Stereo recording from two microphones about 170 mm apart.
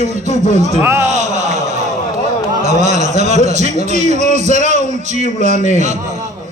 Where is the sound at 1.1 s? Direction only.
45° right (ahead or behind).